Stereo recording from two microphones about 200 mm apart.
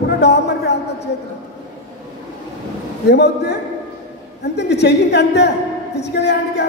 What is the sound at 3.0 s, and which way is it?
A woman's voice, 55° left (ahead or behind).